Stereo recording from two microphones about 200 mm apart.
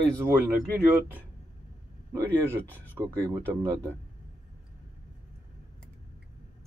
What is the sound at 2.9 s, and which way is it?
Speech, 15° right (ahead or behind).